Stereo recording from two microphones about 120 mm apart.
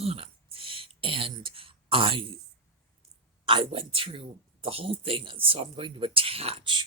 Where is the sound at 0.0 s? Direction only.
55° right (ahead or behind).